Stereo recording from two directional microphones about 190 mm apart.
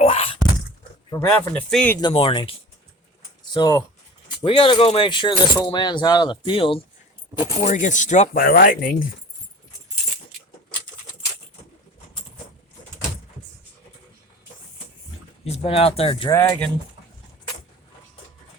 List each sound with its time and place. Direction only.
0.0 s thunk: 30° left (ahead or behind)
1.3 s speech: 5° left (ahead or behind)
2.0 s speech: 25° left (ahead or behind)
7.6 s speech: 40° left (ahead or behind)
8.3 s speech: 50° left (ahead or behind)
15.4 s speech: 30° left (ahead or behind)
16.3 s speech: 10° left (ahead or behind)